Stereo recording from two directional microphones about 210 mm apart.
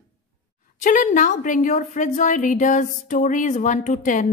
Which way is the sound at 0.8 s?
40° left (ahead or behind).